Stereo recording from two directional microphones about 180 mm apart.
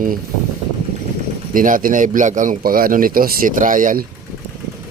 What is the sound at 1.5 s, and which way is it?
A man's voice, 50° right (ahead or behind).